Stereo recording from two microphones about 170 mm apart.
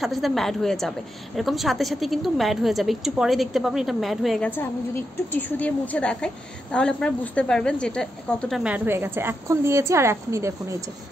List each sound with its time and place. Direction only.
0.0 s a woman's voice: centre (ahead or behind); by 10.8 s 15° right (ahead or behind)